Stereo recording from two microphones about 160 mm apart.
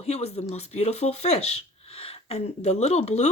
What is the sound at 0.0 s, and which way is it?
Speech, 40° left (ahead or behind).